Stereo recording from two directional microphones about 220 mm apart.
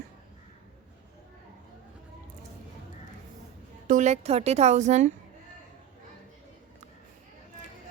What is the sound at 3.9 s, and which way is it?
A woman's voice, 35° right (ahead or behind).